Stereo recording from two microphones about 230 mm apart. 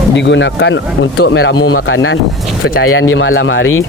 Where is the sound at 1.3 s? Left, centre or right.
Left.